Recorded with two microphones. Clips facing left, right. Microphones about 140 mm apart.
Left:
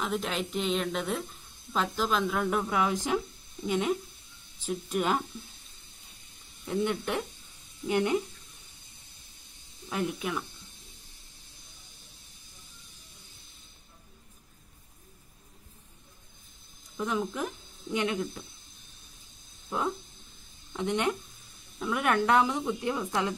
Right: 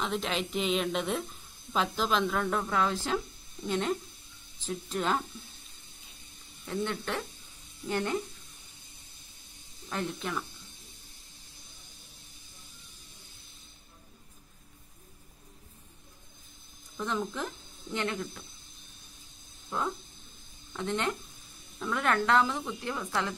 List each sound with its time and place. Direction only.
0.0 s a woman's voice: centre (ahead or behind)
6.6 s a woman's voice: 15° left (ahead or behind)
9.8 s a woman's voice: 10° left (ahead or behind)
16.9 s speech: 10° left (ahead or behind)
20.7 s a woman's voice: 15° left (ahead or behind)